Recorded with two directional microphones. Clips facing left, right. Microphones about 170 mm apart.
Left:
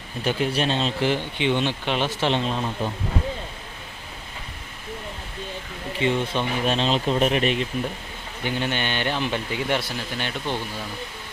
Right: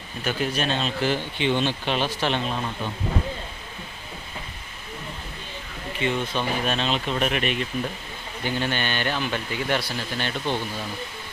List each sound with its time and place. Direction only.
0.3 s speech: 25° left (ahead or behind)
6.0 s speech: 30° left (ahead or behind)
8.7 s speech: 20° left (ahead or behind)